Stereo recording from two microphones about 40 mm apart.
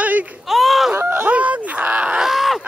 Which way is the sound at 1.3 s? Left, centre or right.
Right.